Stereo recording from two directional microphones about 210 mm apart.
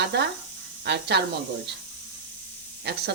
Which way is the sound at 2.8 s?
55° right (ahead or behind).